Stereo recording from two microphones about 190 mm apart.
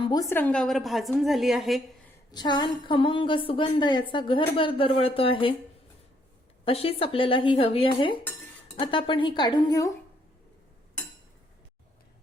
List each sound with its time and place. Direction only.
0.0 s a woman's voice: 20° left (ahead or behind); by 1.8 s centre (ahead or behind)
2.3 s a woman's voice: 25° left (ahead or behind)
6.7 s a woman's voice: 30° left (ahead or behind)